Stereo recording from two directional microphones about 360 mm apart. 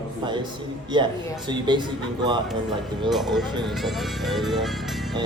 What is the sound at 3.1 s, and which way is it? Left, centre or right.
Speech, centre.